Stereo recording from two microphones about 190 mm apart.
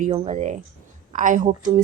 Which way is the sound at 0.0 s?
35° right (ahead or behind).